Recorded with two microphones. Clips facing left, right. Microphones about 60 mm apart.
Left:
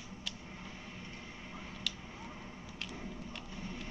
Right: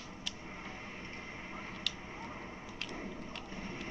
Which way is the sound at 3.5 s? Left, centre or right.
Right.